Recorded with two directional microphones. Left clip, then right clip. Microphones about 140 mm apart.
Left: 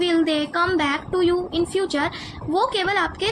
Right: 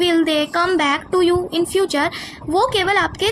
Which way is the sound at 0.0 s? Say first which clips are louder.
Right 4 dB; 40° right (ahead or behind).